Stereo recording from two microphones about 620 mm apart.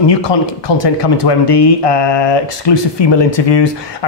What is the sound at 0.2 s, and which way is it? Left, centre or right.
Speech, left.